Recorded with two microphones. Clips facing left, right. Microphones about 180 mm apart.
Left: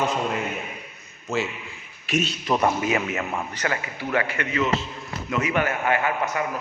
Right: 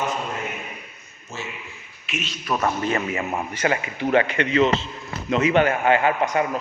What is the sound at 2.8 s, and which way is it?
Speech, 5° left (ahead or behind).